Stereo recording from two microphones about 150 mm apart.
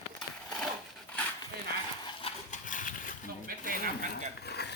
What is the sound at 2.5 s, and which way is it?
Horse, 60° left (ahead or behind).